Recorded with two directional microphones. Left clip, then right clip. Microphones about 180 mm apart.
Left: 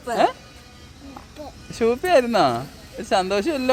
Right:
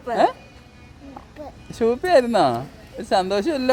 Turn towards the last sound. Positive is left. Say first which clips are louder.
# right 1 dB
turn(degrees=-10)  # may be behind; listen again after turning